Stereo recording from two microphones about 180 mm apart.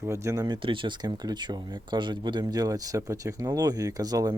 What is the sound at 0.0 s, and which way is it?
Speech, 15° right (ahead or behind).